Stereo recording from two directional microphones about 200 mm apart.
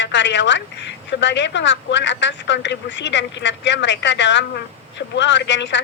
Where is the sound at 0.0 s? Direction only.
65° left (ahead or behind).